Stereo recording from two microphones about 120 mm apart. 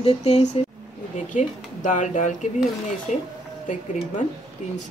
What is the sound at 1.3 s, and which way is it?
Speech, 90° left.